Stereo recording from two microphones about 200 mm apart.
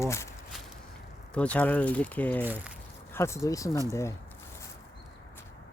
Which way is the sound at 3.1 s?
15° left (ahead or behind).